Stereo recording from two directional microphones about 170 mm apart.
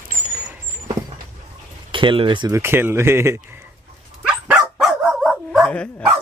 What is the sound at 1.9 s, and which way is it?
Speech, 30° right (ahead or behind).